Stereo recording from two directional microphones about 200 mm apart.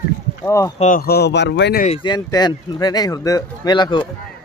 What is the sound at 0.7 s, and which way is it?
Speech, 40° left (ahead or behind).